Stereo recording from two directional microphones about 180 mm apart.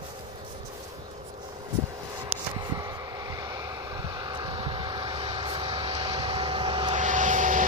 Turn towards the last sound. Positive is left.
turn(degrees=-45)  # may be behind; listen again after turning